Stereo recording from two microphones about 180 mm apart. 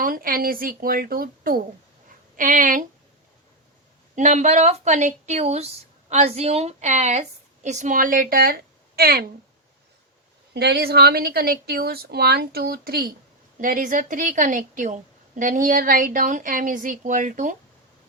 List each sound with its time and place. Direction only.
0.0 s a woman's voice: 55° right (ahead or behind)
4.1 s a woman's voice: 40° right (ahead or behind); by 9.2 s 60° right (ahead or behind)
10.5 s a woman's voice: 65° right (ahead or behind); by 17.6 s 45° right (ahead or behind)